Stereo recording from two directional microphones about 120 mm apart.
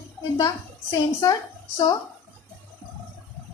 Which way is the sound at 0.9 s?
30° left (ahead or behind).